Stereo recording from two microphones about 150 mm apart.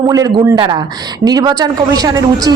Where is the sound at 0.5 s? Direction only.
35° right (ahead or behind).